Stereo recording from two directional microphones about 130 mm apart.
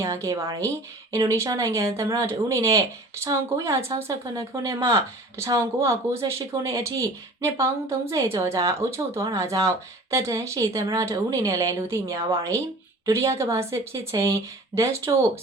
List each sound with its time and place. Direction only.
0.0 s a woman's voice: 25° right (ahead or behind)